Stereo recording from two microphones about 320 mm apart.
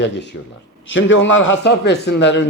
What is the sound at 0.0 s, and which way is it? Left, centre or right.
A man's voice, left.